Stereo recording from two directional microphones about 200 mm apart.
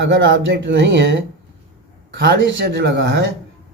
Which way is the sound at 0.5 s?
60° right (ahead or behind).